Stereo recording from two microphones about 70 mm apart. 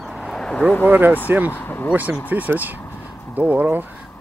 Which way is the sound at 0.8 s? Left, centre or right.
Right.